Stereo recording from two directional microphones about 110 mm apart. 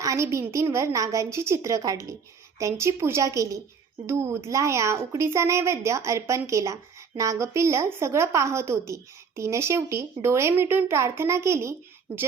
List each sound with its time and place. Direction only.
0.0 s a woman's voice: 25° right (ahead or behind)